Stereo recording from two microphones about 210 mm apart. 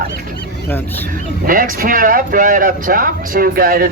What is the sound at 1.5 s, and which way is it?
Speech, 40° right (ahead or behind).